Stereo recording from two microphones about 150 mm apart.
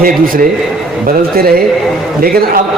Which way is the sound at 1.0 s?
90° right.